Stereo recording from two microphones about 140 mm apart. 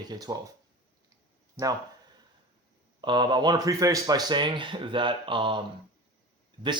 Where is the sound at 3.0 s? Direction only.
30° right (ahead or behind).